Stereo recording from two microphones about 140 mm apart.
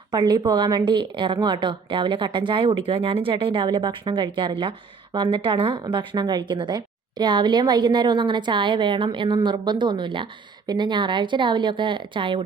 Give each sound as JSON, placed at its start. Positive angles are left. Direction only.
{"t": 0.1, "sound": "speech", "side_deg": -30}